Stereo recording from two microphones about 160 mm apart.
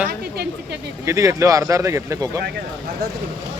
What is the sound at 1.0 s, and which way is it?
Speech, 20° right (ahead or behind).